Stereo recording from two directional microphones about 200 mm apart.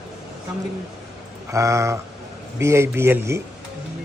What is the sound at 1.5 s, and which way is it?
Speech, 15° right (ahead or behind).